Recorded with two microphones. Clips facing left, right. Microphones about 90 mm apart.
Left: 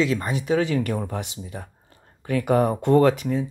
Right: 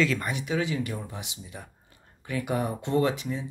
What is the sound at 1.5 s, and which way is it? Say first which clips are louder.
Speech: left 6 dB; 40° left (ahead or behind).